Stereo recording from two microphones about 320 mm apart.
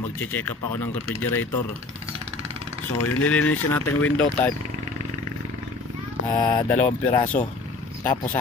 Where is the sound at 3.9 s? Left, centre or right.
Left.